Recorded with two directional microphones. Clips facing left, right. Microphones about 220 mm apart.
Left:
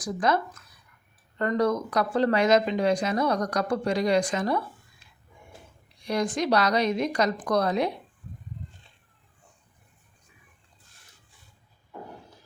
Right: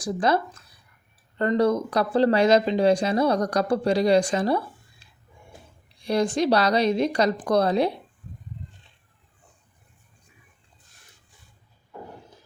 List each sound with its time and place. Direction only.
0.0 s speech: 30° right (ahead or behind)